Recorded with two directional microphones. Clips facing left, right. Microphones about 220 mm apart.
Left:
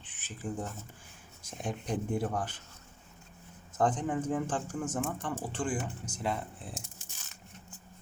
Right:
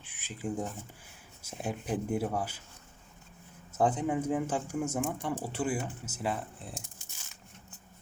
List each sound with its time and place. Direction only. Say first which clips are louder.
0.0 s speech: right 2 dB; 10° right (ahead or behind)
3.8 s speech: right 1 dB; 10° right (ahead or behind)